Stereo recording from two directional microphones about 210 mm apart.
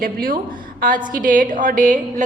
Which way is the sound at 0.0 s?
45° right (ahead or behind).